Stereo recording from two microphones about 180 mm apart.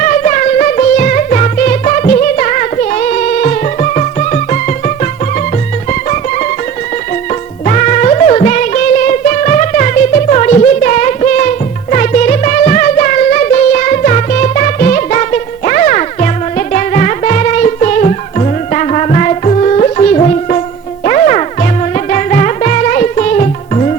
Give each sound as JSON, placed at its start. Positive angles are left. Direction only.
{"t": 0.0, "sound": "music", "side_deg": 40}
{"t": 7.6, "sound": "music", "side_deg": 40}